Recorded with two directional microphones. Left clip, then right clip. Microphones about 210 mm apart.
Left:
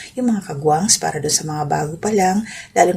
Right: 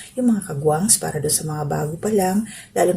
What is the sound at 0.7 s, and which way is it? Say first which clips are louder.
Speech: left 5 dB; 10° right (ahead or behind).